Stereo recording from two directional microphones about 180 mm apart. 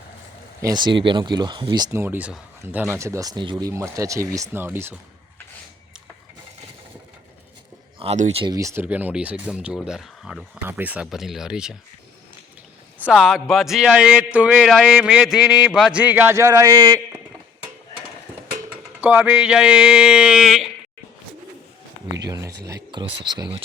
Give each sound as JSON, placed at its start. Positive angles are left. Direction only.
{"t": 0.6, "sound": "speech", "side_deg": -25}
{"t": 7.9, "sound": "speech", "side_deg": -40}
{"t": 8.5, "sound": "speech", "side_deg": -15}
{"t": 13.0, "sound": "speech", "side_deg": -5}
{"t": 19.0, "sound": "speech", "side_deg": -10}
{"t": 22.3, "sound": "a sound", "side_deg": -15}
{"t": 23.2, "sound": "speech", "side_deg": -25}